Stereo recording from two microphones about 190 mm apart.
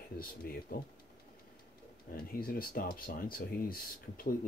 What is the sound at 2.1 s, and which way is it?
Speech, 50° left (ahead or behind).